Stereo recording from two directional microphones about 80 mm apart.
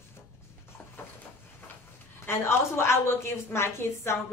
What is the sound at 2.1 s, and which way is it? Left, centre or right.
A woman's voice, left.